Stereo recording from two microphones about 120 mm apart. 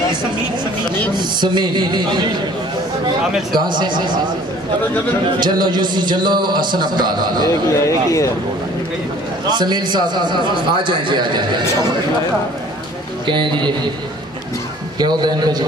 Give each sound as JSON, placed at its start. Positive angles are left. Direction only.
{"t": 1.1, "sound": "a man's voice", "side_deg": -40}
{"t": 3.5, "sound": "a man's voice", "side_deg": -40}
{"t": 5.4, "sound": "a man's voice", "side_deg": -40}
{"t": 7.8, "sound": "speech", "side_deg": 25}
{"t": 9.5, "sound": "a man's voice", "side_deg": -35}
{"t": 13.3, "sound": "a man's voice", "side_deg": -40}
{"t": 15.0, "sound": "a man's voice", "side_deg": -35}